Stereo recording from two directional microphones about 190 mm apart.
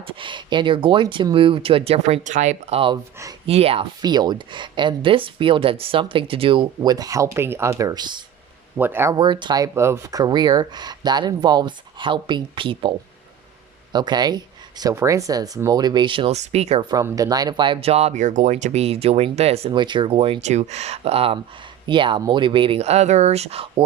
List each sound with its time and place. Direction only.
0.0 s speech: 25° right (ahead or behind)
8.8 s speech: 10° right (ahead or behind)
9.1 s speech: 25° right (ahead or behind)
13.9 s speech: 20° right (ahead or behind)
16.9 s speech: 20° right (ahead or behind)